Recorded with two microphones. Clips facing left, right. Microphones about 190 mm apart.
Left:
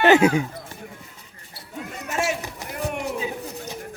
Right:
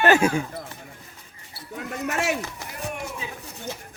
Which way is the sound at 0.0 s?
20° left (ahead or behind).